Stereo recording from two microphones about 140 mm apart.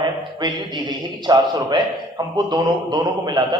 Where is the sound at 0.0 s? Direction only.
30° right (ahead or behind).